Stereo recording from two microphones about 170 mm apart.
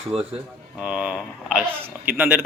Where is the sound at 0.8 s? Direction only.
5° right (ahead or behind).